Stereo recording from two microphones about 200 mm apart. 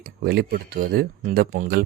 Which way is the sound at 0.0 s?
50° right (ahead or behind).